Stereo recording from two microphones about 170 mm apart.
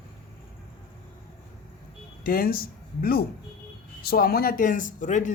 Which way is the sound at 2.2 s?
60° left (ahead or behind).